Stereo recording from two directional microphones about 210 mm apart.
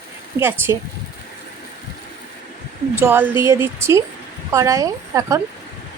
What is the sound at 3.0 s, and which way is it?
Speech, 10° right (ahead or behind).